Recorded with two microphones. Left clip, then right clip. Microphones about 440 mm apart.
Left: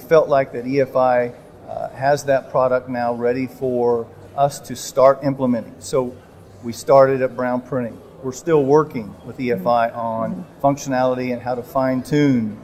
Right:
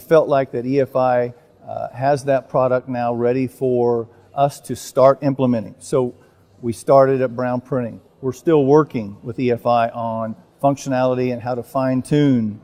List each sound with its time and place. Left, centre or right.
0.1 s a man's voice: right